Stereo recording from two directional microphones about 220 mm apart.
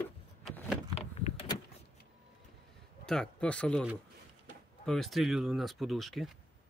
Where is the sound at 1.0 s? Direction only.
25° left (ahead or behind).